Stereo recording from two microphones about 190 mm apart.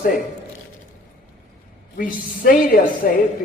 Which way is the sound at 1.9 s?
50° left (ahead or behind).